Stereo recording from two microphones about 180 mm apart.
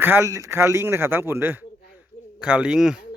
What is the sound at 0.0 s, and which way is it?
Speech, 15° right (ahead or behind).